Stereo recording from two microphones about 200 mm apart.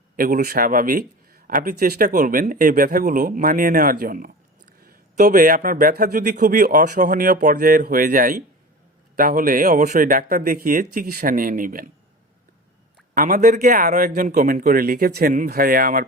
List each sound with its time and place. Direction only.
0.2 s speech: 45° right (ahead or behind)
13.1 s speech: 40° right (ahead or behind)